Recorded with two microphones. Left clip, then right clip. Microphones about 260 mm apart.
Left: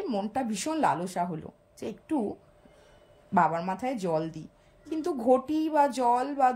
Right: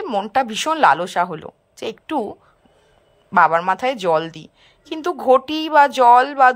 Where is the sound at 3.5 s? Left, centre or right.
Right.